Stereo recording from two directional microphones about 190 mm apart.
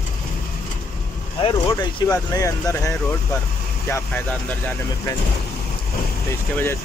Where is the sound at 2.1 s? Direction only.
15° left (ahead or behind).